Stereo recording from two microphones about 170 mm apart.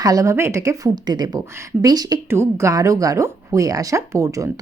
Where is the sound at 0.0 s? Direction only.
20° right (ahead or behind).